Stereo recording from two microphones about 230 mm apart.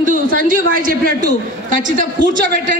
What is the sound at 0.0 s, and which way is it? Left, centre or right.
A man's voice, right.